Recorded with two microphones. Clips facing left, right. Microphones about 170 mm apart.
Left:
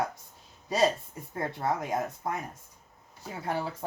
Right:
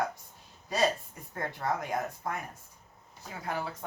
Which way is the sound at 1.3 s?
25° left (ahead or behind).